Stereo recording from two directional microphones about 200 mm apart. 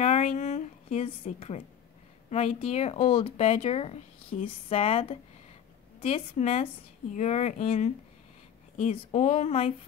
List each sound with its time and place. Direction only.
0.0 s a woman's voice: 35° left (ahead or behind)